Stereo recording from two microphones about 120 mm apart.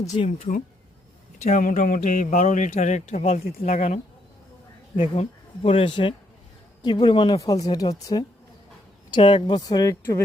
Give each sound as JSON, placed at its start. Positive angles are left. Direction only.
{"t": 0.3, "sound": "speech", "side_deg": 80}
{"t": 4.9, "sound": "speech", "side_deg": 55}
{"t": 7.4, "sound": "speech", "side_deg": 30}
{"t": 9.1, "sound": "speech", "side_deg": 45}
{"t": 9.6, "sound": "speech", "side_deg": 30}